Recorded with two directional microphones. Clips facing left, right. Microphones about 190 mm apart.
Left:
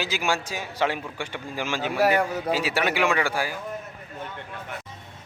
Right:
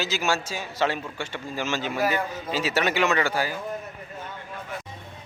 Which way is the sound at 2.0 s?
70° left (ahead or behind).